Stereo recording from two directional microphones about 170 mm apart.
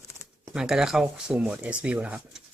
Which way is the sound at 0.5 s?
5° right (ahead or behind).